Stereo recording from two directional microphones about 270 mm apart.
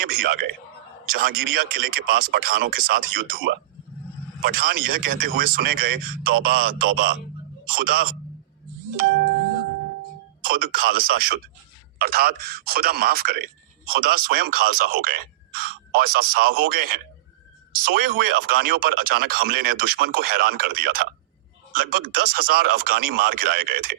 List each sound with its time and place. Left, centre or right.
0.0 s speech: right
10.4 s speech: right